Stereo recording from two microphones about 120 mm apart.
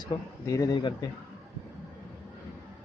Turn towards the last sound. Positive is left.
turn(degrees=35)  # may be behind; listen again after turning